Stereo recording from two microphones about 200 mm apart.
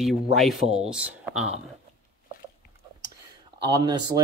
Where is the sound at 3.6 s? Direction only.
20° right (ahead or behind).